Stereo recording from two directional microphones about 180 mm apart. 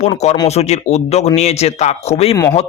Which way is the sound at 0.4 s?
35° left (ahead or behind).